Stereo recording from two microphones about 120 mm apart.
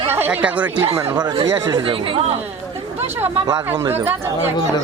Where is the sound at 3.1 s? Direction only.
25° right (ahead or behind).